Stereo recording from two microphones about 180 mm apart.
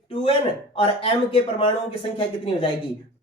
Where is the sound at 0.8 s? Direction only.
30° left (ahead or behind).